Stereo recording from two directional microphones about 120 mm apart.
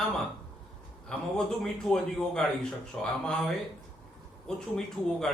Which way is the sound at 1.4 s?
5° left (ahead or behind).